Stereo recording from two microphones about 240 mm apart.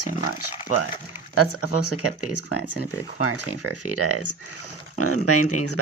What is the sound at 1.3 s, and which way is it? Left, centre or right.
Speech, left.